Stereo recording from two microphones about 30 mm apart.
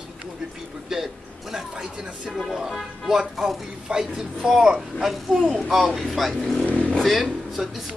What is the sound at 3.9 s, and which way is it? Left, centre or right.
Speech, right.